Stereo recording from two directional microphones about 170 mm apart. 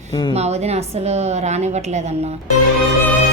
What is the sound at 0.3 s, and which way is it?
Speech, 40° right (ahead or behind).